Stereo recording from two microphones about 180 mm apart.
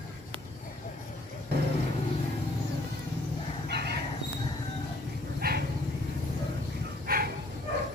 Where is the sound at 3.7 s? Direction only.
65° right (ahead or behind).